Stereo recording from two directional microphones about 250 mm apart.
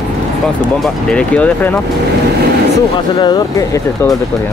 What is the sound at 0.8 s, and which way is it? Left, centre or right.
Speech, centre.